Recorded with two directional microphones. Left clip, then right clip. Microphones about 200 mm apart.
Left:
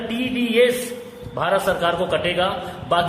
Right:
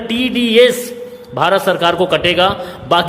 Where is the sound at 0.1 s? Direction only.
50° right (ahead or behind).